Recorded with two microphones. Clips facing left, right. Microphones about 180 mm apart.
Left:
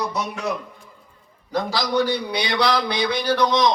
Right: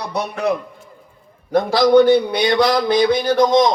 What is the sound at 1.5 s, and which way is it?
A man's voice, 55° right (ahead or behind).